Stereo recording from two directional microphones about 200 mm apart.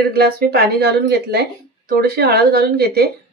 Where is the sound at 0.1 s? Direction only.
50° right (ahead or behind).